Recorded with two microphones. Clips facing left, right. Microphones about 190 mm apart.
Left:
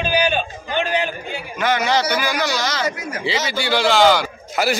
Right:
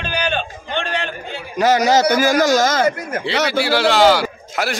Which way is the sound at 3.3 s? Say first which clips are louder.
Right 5 dB; 65° right (ahead or behind).